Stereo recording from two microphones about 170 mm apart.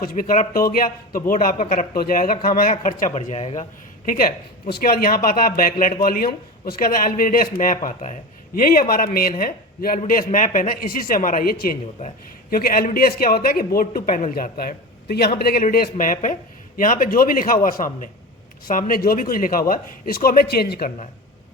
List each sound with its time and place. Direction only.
0.0 s speech: 55° left (ahead or behind)
1.9 s speech: 60° left (ahead or behind); by 3.7 s 40° left (ahead or behind)
4.0 s speech: 55° left (ahead or behind)
12.0 s a man's voice: 35° left (ahead or behind)
12.5 s speech: 60° left (ahead or behind)